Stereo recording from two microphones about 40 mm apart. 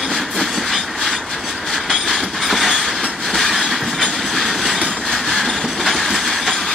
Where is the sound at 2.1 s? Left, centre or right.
Centre.